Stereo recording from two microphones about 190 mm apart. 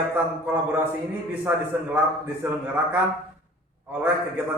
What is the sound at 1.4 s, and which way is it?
A man's voice, 10° right (ahead or behind).